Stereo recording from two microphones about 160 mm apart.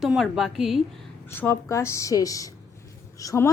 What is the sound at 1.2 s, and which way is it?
A woman's voice, 15° left (ahead or behind).